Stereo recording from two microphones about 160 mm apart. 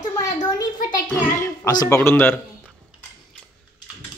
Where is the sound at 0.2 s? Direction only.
25° left (ahead or behind).